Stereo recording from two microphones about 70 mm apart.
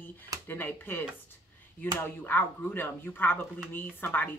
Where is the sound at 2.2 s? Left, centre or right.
Left.